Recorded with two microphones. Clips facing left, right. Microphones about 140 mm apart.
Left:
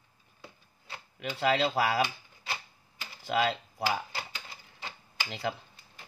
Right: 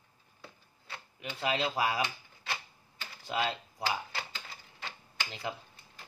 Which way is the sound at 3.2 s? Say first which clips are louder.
Left 5 dB; 75° left (ahead or behind).